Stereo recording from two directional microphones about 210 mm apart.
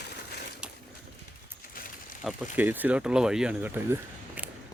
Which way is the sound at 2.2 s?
5° right (ahead or behind).